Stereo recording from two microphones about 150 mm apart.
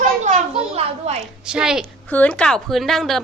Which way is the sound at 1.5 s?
5° right (ahead or behind).